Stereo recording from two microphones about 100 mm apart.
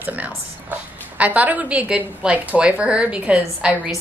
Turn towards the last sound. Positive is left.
turn(degrees=-10)  # may be behind; listen again after turning